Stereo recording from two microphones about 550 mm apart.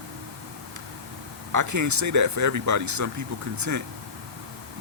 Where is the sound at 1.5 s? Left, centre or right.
Right.